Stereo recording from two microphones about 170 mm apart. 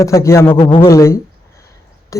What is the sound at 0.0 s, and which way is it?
A man's voice, 15° left (ahead or behind).